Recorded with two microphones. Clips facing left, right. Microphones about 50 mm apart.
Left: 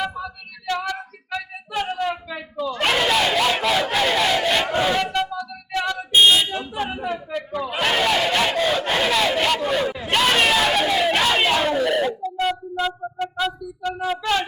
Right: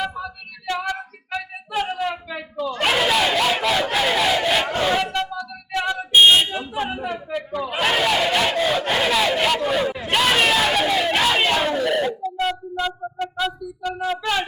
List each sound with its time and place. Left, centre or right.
0.7 s female singing: centre
2.7 s battle cry: centre
5.7 s a sound: centre
6.1 s a sound: right
6.5 s buzzer: centre
7.1 s battle cry: centre